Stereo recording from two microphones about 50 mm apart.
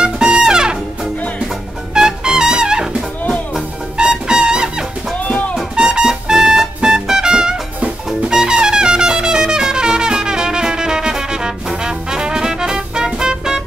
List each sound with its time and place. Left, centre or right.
0.0 s brass instrument: centre
2.0 s trumpet: centre
4.0 s music: centre
5.2 s music: left
5.8 s music: centre
8.3 s trumpet: centre